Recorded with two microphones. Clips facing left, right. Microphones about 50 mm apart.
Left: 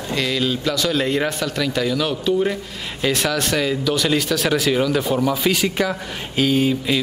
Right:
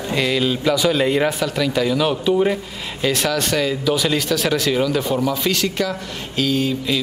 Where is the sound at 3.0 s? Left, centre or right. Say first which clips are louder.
Right 1 dB; centre.